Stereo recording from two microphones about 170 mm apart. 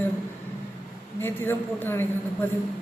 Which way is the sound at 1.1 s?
15° left (ahead or behind).